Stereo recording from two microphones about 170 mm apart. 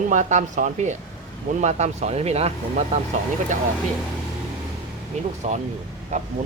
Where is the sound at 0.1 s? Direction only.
45° right (ahead or behind).